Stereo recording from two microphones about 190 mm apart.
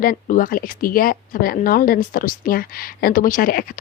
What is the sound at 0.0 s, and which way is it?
Speech, 45° left (ahead or behind).